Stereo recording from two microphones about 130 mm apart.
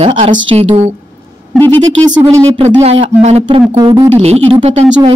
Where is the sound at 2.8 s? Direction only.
55° right (ahead or behind).